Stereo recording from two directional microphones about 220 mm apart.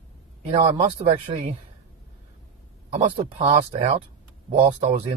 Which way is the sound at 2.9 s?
30° right (ahead or behind).